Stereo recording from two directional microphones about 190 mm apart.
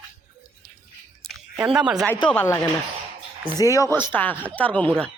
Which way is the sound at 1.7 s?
5° right (ahead or behind).